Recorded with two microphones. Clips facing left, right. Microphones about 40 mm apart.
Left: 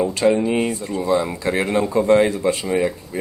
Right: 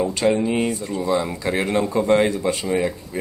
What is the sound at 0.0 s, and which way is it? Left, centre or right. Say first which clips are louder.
Speech: left 2 dB; centre.